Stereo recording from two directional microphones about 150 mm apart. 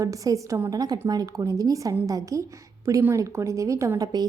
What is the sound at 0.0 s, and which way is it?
A woman's voice, 20° right (ahead or behind).